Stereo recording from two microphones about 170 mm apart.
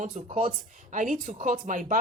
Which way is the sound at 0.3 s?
50° right (ahead or behind).